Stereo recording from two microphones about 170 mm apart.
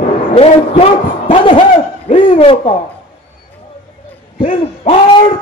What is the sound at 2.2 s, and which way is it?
Speech, 30° left (ahead or behind).